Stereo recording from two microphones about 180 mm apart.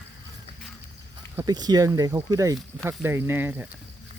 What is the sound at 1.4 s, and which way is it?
Speech, 20° right (ahead or behind).